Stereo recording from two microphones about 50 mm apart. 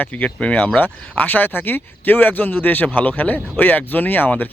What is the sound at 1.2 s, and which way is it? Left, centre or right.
Speech, left.